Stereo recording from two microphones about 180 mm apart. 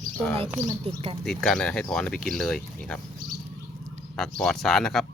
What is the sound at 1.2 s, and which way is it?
Speech, 5° left (ahead or behind).